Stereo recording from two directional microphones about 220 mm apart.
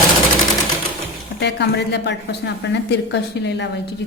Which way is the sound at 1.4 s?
50° left (ahead or behind).